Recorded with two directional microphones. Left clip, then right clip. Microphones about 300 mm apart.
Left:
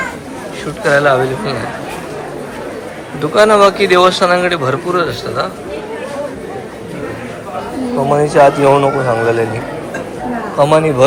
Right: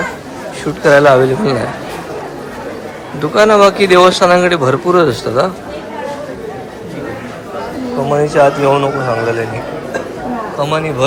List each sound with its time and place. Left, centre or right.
0.9 s speech: centre
3.2 s speech: centre
8.0 s a man's voice: centre
10.6 s a man's voice: centre